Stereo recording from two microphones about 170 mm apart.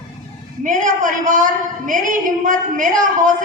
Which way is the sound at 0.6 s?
50° right (ahead or behind).